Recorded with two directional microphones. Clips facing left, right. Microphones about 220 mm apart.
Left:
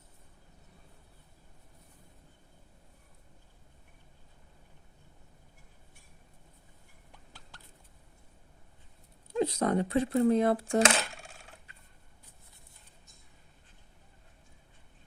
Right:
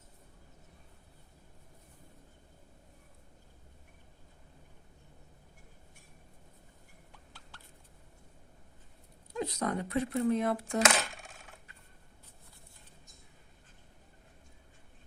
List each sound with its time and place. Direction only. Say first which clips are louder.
9.3 s speech: left 6 dB; 30° left (ahead or behind)